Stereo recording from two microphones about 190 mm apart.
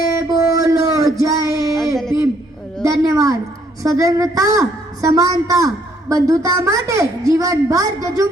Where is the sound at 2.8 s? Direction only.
15° right (ahead or behind).